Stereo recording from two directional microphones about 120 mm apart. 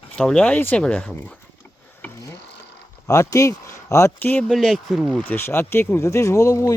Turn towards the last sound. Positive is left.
turn(degrees=25)  # may be behind; listen again after turning